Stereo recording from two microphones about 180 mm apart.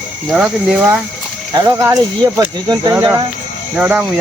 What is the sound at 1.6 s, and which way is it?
Speech, 15° right (ahead or behind).